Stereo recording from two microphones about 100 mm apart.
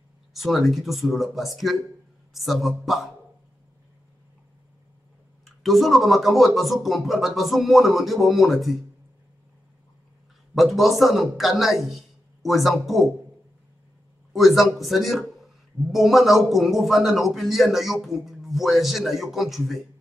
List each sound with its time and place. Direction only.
0.3 s speech: centre (ahead or behind)
5.4 s speech: centre (ahead or behind)
10.5 s speech: centre (ahead or behind)
14.3 s speech: centre (ahead or behind)